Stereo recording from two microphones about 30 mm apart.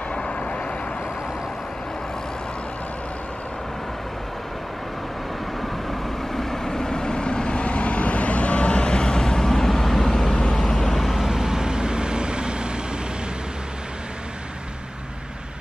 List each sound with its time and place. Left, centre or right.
5.6 s vehicle: centre
10.9 s vehicle: centre
11.3 s vehicle: centre